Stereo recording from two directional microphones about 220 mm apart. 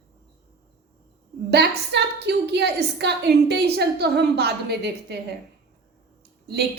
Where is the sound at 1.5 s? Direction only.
50° right (ahead or behind).